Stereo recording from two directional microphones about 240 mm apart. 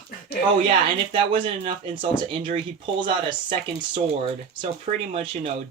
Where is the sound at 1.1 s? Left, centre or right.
Right.